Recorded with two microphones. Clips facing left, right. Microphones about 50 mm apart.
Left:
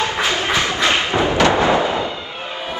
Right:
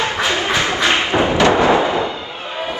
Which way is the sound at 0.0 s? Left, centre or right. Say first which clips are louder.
Right 1 dB; right.